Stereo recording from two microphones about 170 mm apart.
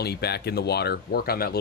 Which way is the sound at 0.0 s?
70° left (ahead or behind).